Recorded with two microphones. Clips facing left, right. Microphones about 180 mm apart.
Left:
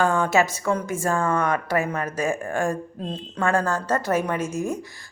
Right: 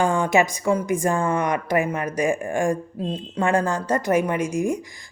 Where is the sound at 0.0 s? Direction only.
15° right (ahead or behind).